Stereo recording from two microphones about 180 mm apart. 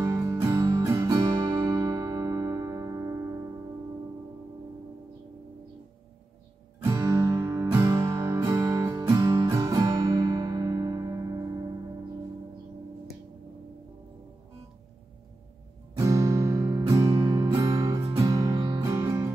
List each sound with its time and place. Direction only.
0.0 s music: 15° right (ahead or behind)
6.8 s music: 15° right (ahead or behind)
16.0 s music: 20° right (ahead or behind)